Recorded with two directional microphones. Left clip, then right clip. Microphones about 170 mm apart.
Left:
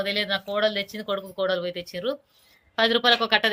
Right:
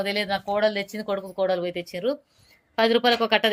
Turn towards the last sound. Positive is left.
turn(degrees=-20)  # may be behind; listen again after turning